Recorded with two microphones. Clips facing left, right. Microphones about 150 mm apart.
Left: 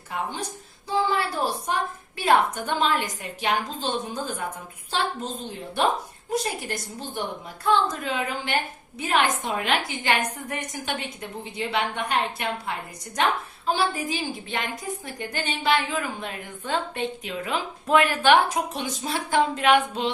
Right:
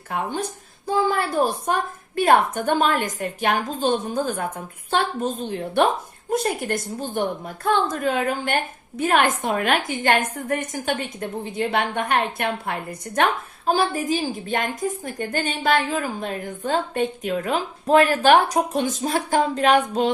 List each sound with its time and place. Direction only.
0.1 s a woman's voice: 50° right (ahead or behind)
13.7 s a woman's voice: 45° right (ahead or behind)